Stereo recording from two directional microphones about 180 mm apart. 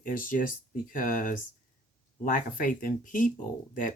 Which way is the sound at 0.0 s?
50° left (ahead or behind).